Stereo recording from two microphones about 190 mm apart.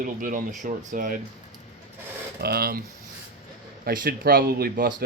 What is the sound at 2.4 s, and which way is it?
Speech, 55° right (ahead or behind).